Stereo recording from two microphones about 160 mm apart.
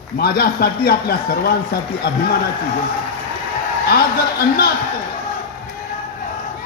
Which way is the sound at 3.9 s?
75° left (ahead or behind).